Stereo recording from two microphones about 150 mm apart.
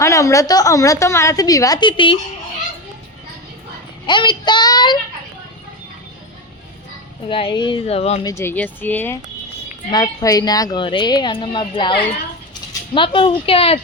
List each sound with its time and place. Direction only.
0.0 s a woman's voice: 20° left (ahead or behind)
4.0 s a woman's voice: 30° left (ahead or behind)
7.3 s a woman's voice: 35° left (ahead or behind)
7.9 s speech: 45° left (ahead or behind)
8.2 s speech: 20° left (ahead or behind)
9.9 s a woman's voice: 25° left (ahead or behind)